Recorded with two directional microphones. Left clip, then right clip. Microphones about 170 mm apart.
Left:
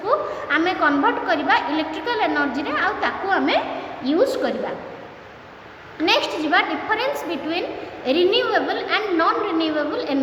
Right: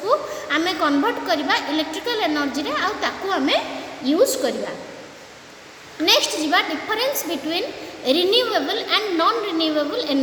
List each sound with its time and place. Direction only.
0.1 s a woman's voice: 70° right (ahead or behind)
4.0 s a woman's voice: 90° right
6.1 s a woman's voice: 70° right (ahead or behind)